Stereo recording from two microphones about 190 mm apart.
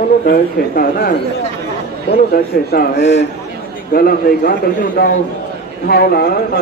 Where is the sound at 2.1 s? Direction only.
50° left (ahead or behind).